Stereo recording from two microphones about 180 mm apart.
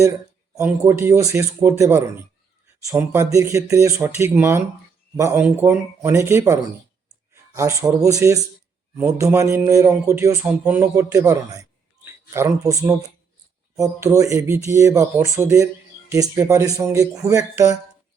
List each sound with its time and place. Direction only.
0.5 s speech: 15° right (ahead or behind)